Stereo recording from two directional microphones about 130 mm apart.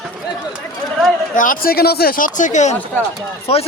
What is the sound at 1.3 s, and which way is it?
A man's voice, 90° left.